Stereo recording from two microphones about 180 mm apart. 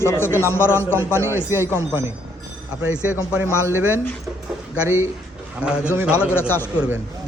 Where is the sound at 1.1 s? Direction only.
15° right (ahead or behind).